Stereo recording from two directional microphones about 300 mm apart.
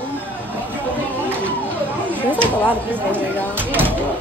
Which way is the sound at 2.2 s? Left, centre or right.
Centre.